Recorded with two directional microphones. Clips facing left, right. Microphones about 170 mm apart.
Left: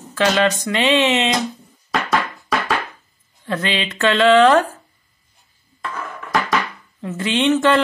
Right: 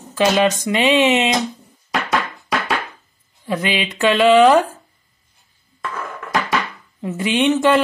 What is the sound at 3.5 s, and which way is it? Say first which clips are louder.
Speech: right 1 dB; 15° right (ahead or behind).